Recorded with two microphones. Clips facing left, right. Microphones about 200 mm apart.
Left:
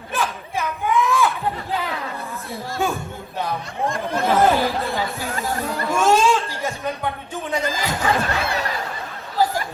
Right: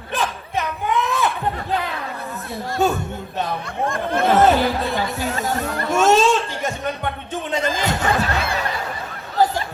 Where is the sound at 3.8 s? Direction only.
55° right (ahead or behind).